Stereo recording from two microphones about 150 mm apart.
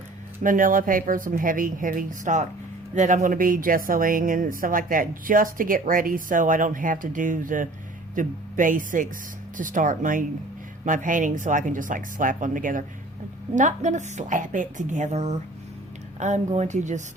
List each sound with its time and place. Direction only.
0.4 s speech: 60° right (ahead or behind)